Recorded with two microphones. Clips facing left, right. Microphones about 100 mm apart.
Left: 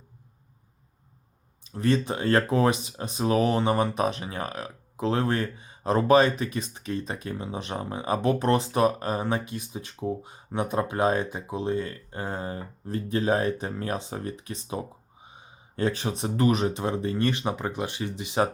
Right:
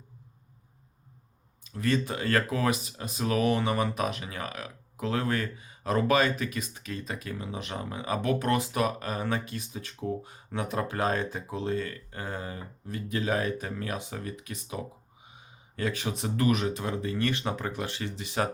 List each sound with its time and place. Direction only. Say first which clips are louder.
1.6 s speech: left 4 dB; 30° left (ahead or behind)
9.2 s speech: left 3 dB; 20° left (ahead or behind)
16.7 s speech: left 4 dB; 20° left (ahead or behind)